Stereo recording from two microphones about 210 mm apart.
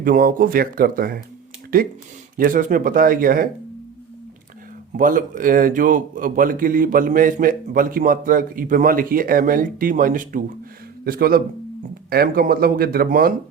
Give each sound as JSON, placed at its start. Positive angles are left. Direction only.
{"t": 0.0, "sound": "a man's voice", "side_deg": -45}
{"t": 4.9, "sound": "a man's voice", "side_deg": -40}